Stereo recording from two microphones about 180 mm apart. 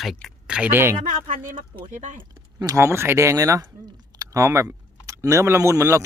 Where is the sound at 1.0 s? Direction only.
45° right (ahead or behind).